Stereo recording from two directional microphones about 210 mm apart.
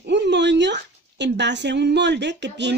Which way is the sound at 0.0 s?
55° right (ahead or behind).